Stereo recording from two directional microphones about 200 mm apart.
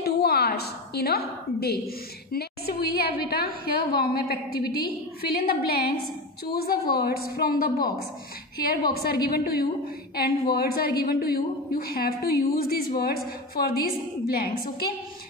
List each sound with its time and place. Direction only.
0.0 s a woman's voice: 55° left (ahead or behind)
9.0 s a woman's voice: 50° left (ahead or behind)
14.3 s a woman's voice: 50° left (ahead or behind)